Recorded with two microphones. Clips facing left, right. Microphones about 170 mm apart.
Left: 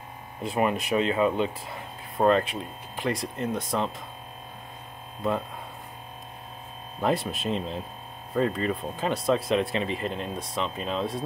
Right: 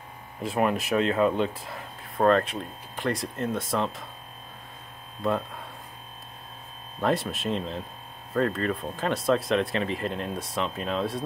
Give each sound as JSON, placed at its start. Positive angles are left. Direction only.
{"t": 0.4, "sound": "speech", "side_deg": 0}
{"t": 7.0, "sound": "speech", "side_deg": 0}